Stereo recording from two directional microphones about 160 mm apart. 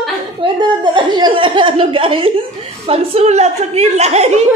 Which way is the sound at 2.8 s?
40° right (ahead or behind).